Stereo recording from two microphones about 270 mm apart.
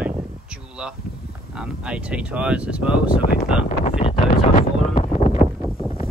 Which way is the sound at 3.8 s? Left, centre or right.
Left.